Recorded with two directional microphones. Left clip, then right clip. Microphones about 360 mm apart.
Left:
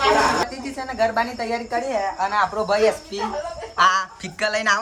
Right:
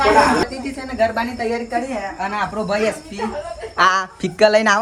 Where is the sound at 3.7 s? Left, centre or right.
Centre.